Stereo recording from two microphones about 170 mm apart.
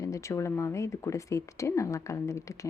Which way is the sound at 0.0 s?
20° left (ahead or behind).